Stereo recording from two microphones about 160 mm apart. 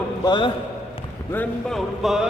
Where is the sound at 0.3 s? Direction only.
30° left (ahead or behind).